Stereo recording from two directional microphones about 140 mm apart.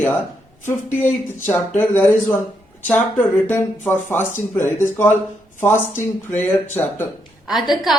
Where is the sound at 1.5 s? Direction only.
15° left (ahead or behind).